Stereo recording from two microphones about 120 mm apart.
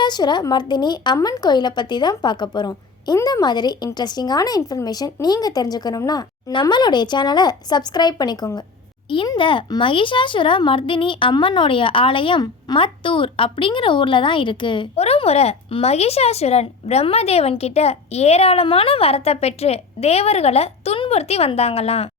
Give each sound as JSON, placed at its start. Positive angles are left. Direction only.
{"t": 0.0, "sound": "speech", "side_deg": 35}
{"t": 14.9, "sound": "speech", "side_deg": 60}